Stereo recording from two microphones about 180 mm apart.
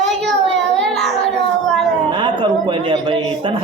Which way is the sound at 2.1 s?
25° right (ahead or behind).